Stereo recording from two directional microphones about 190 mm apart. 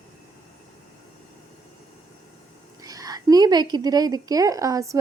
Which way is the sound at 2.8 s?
20° right (ahead or behind).